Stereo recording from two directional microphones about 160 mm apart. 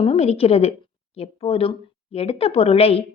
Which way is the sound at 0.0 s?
40° left (ahead or behind).